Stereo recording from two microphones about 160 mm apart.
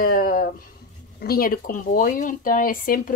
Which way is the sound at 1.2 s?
65° left (ahead or behind).